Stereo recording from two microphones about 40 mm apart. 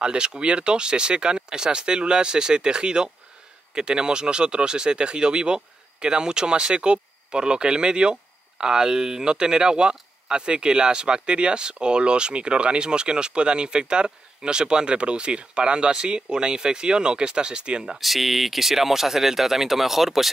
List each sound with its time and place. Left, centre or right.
0.0 s speech: right
17.8 s speech: centre